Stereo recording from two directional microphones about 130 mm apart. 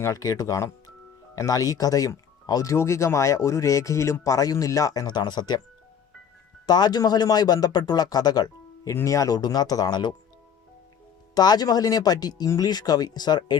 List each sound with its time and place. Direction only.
0.0 s speech: 25° left (ahead or behind)
6.7 s speech: 30° left (ahead or behind)
11.3 s speech: 30° left (ahead or behind)